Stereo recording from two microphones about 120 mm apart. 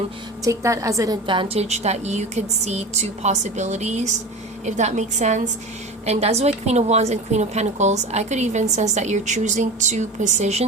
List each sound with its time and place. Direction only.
0.4 s a woman's voice: 25° right (ahead or behind)
1.3 s a woman's voice: 50° right (ahead or behind); by 5.4 s 75° right (ahead or behind)
6.1 s a woman's voice: 60° right (ahead or behind)